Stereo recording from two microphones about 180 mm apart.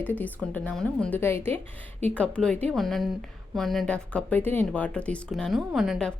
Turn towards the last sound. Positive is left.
turn(degrees=0)  # may be behind; listen again after turning